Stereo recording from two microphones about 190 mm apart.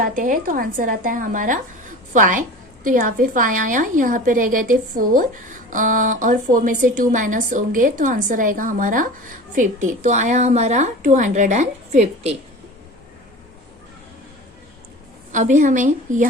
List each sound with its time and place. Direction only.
0.0 s a woman's voice: 45° right (ahead or behind)
15.3 s a woman's voice: 40° right (ahead or behind)